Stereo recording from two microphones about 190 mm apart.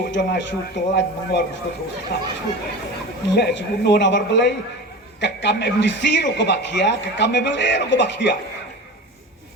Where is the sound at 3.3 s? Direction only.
60° left (ahead or behind).